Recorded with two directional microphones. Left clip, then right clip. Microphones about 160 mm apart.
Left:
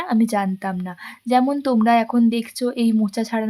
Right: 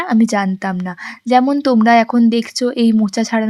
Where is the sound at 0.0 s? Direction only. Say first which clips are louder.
Right 5 dB; 20° right (ahead or behind).